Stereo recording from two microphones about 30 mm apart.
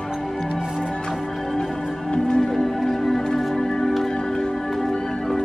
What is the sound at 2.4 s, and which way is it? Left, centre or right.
Music, centre.